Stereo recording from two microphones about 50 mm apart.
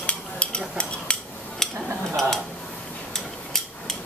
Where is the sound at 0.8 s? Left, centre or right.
Centre.